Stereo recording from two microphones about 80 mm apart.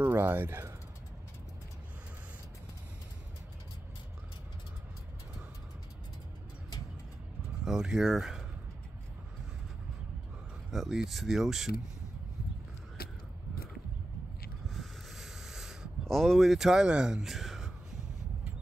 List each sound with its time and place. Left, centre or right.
0.0 s speech: right
7.6 s speech: centre
10.7 s speech: centre
14.7 s a sound: centre